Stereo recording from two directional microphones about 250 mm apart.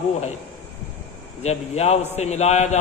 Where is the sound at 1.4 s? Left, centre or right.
Left.